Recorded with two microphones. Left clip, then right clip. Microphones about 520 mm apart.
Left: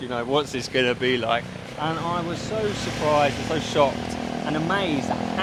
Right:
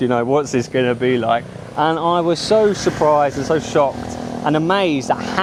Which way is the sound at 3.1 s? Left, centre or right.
Right.